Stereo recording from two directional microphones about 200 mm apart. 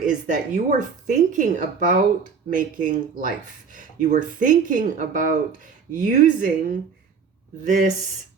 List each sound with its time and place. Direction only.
0.0 s speech: 40° right (ahead or behind)